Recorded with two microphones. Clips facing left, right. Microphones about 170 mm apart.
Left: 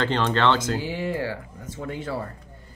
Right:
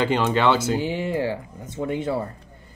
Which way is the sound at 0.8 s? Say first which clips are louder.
Right 3 dB; 20° right (ahead or behind).